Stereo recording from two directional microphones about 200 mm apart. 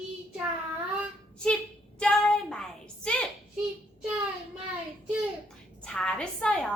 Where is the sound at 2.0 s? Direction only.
5° left (ahead or behind).